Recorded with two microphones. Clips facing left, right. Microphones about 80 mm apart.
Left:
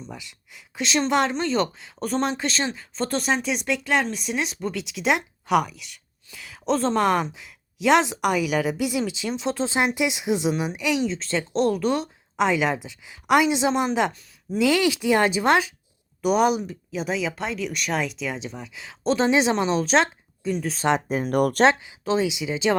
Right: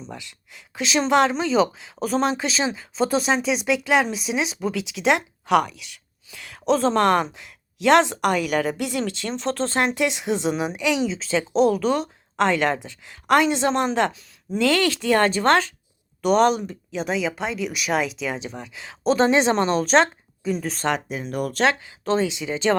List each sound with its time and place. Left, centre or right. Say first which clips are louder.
0.0 s speech: right 2 dB; centre
21.1 s speech: left 6 dB; left
22.0 s speech: right 1 dB; centre